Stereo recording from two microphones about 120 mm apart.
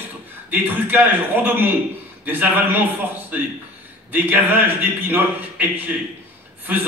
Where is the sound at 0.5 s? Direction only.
15° right (ahead or behind).